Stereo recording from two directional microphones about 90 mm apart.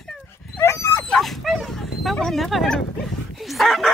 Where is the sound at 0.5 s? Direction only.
30° left (ahead or behind).